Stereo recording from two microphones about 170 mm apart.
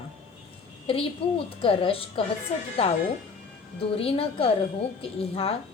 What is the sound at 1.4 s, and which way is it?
Speech, 35° left (ahead or behind).